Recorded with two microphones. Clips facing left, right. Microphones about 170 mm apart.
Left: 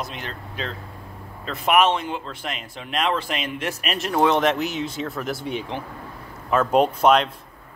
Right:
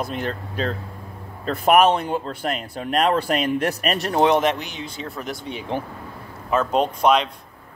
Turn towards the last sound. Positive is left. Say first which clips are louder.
# left 1 dB
turn(degrees=5)  # may be behind; listen again after turning